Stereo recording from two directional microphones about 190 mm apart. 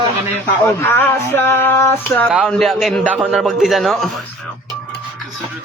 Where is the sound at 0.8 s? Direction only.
10° left (ahead or behind).